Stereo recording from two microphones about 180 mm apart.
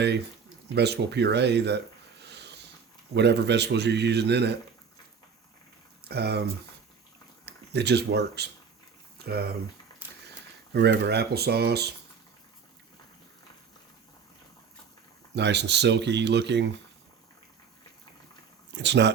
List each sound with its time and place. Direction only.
0.7 s a man's voice: 70° right (ahead or behind)
2.2 s a sound: 70° right (ahead or behind)
3.2 s a man's voice: 70° right (ahead or behind)
6.1 s speech: 65° right (ahead or behind)
7.4 s speech: 65° right (ahead or behind)
9.1 s a sound: 60° right (ahead or behind)
10.7 s speech: 65° right (ahead or behind)
15.4 s a man's voice: 70° right (ahead or behind)
18.7 s speech: 75° right (ahead or behind)